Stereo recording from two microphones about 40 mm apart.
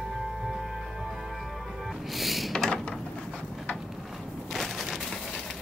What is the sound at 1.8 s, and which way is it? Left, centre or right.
Music, centre.